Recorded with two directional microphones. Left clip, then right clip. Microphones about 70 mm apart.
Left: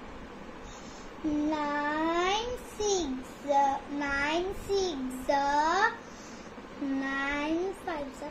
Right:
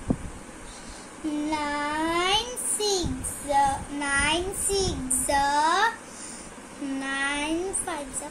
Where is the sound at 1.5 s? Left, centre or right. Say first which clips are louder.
Right 5 dB; centre; by 5.9 s right.